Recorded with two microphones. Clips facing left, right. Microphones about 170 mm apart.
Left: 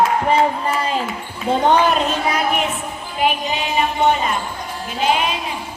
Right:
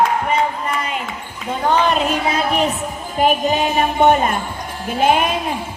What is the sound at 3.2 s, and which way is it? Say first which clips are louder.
Music: right 4 dB; 45° right (ahead or behind).